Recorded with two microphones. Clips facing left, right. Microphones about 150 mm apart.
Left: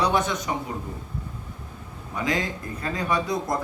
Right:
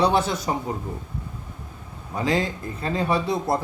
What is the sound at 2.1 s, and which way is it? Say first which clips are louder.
A man's voice: right 3 dB; 30° right (ahead or behind).